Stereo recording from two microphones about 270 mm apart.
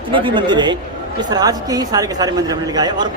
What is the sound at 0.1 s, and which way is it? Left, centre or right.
Speech, centre.